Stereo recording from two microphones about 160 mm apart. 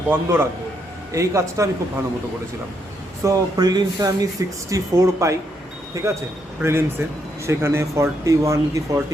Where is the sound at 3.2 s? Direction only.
25° right (ahead or behind).